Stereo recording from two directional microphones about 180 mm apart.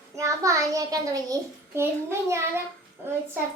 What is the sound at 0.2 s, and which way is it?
A child's voice, 15° right (ahead or behind).